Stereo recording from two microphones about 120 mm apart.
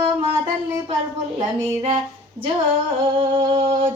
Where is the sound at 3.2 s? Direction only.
40° right (ahead or behind).